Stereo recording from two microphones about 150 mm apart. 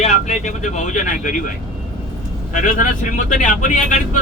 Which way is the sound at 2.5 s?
60° left (ahead or behind).